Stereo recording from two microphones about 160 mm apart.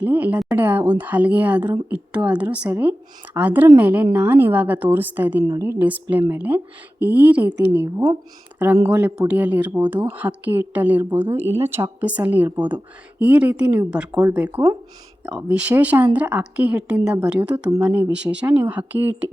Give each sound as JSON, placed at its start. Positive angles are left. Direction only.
{"t": 0.0, "sound": "a woman's voice", "side_deg": -10}
{"t": 5.8, "sound": "speech", "side_deg": -10}